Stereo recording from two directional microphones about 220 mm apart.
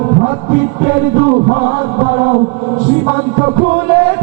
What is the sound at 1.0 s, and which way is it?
Music, 15° right (ahead or behind).